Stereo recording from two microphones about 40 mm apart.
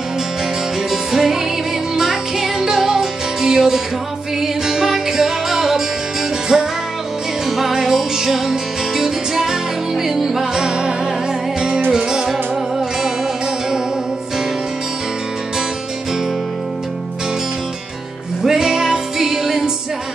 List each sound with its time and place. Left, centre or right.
0.8 s music: centre
18.4 s music: centre